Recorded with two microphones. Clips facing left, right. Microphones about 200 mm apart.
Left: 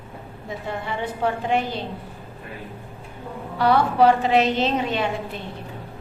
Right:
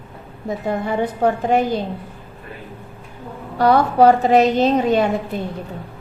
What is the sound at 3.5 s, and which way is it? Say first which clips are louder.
A woman's voice: right 4 dB; 45° right (ahead or behind).